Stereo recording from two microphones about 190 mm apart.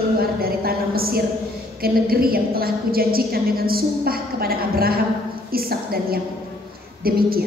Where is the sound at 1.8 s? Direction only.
50° right (ahead or behind).